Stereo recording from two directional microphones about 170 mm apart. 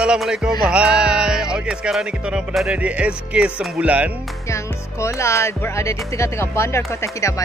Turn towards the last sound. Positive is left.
turn(degrees=15)  # may be behind; listen again after turning